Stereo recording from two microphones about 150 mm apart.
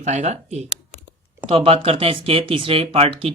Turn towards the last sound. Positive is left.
turn(degrees=-40)  # may be behind; listen again after turning